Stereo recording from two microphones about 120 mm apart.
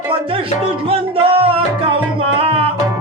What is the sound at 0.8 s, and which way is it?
Music, 50° right (ahead or behind).